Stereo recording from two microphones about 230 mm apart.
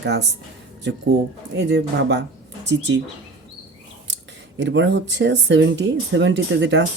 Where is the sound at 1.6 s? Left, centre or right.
Right.